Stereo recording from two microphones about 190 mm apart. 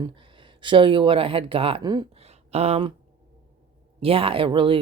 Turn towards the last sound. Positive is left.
turn(degrees=-25)  # may be behind; listen again after turning